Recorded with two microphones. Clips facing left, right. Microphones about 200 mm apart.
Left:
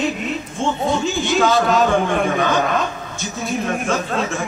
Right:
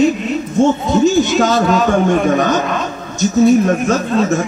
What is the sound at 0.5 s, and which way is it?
Speech, 40° right (ahead or behind).